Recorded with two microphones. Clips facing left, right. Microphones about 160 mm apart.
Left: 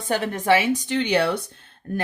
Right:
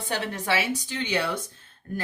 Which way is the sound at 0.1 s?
50° left (ahead or behind).